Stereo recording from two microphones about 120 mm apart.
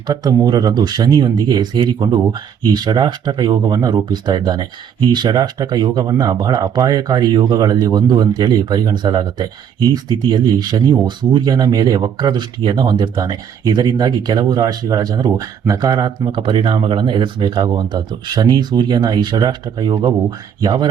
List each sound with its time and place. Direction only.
0.1 s speech: 35° right (ahead or behind)